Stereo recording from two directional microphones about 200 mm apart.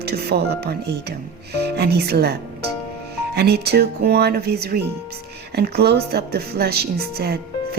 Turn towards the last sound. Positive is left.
turn(degrees=-50)  # may be behind; listen again after turning